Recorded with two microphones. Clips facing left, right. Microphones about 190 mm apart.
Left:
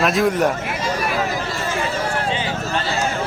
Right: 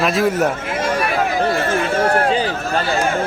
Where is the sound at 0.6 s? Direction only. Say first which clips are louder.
Right 3 dB; 50° right (ahead or behind).